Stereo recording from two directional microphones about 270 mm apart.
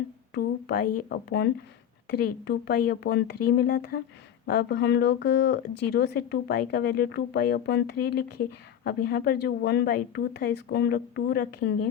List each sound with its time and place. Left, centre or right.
0.3 s speech: left